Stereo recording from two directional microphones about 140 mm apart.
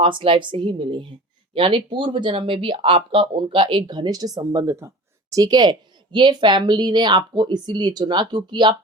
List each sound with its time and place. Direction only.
0.0 s a woman's voice: 40° right (ahead or behind)